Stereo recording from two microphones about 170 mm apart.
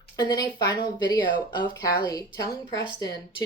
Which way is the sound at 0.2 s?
25° left (ahead or behind).